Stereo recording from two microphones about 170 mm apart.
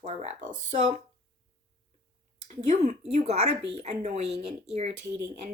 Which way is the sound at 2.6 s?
45° right (ahead or behind).